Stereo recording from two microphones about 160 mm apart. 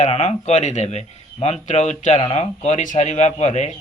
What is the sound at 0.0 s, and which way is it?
Speech, 45° left (ahead or behind).